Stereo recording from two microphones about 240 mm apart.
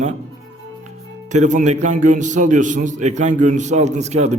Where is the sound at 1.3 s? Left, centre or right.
Right.